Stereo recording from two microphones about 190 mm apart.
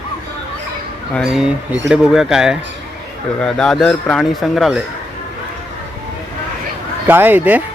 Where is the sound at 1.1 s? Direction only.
Centre (ahead or behind).